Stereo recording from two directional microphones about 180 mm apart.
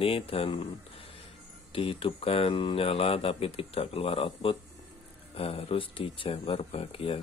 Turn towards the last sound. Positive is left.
turn(degrees=30)  # may be behind; listen again after turning